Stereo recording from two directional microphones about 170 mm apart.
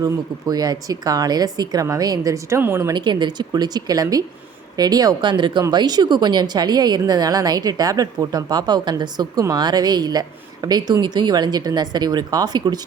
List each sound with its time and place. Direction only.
0.0 s speech: 20° right (ahead or behind)